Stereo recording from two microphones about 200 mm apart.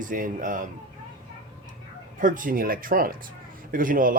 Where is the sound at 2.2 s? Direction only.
40° right (ahead or behind).